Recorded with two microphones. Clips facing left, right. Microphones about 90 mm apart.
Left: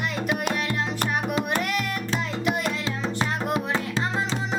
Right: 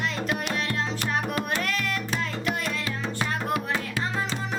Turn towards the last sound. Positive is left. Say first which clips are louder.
# left 2 dB
turn(degrees=25)  # may be behind; listen again after turning